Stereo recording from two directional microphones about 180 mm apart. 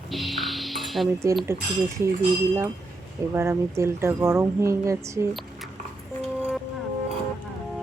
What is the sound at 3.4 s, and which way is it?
Speech, 15° right (ahead or behind).